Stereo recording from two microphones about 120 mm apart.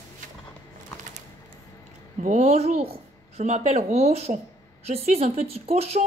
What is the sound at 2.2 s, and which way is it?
A woman's voice, 75° right (ahead or behind).